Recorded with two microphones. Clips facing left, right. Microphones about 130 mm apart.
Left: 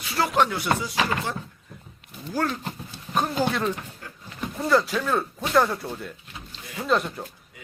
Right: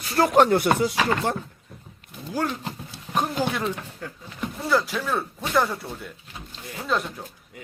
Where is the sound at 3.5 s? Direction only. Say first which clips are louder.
Left 1 dB; 15° right (ahead or behind).